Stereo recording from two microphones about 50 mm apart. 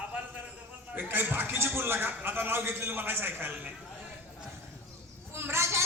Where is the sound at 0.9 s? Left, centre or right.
Right.